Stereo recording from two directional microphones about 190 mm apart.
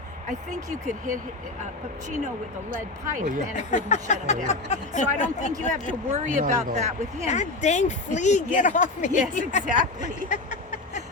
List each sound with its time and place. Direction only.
0.3 s speech: 40° right (ahead or behind)
3.5 s speech: 40° left (ahead or behind)
6.1 s speech: 40° right (ahead or behind)
7.3 s speech: 40° left (ahead or behind)
10.2 s a sound: 40° left (ahead or behind)